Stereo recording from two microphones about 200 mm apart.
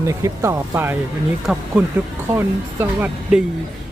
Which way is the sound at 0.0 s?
15° right (ahead or behind).